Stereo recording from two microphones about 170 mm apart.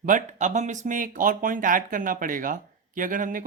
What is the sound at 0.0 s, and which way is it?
Speech, 50° right (ahead or behind).